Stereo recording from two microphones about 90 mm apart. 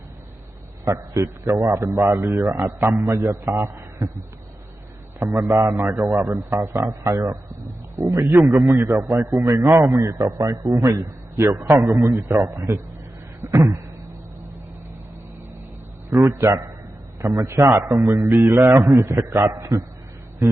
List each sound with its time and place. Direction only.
0.9 s a man's voice: 35° right (ahead or behind)
5.2 s a man's voice: 25° right (ahead or behind)
5.9 s a man's voice: 20° right (ahead or behind)
8.4 s a man's voice: 25° right (ahead or behind)
13.4 s a sound: 35° right (ahead or behind)
16.0 s a man's voice: 35° right (ahead or behind)